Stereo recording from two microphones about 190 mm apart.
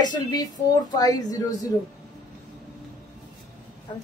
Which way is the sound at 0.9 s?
20° left (ahead or behind).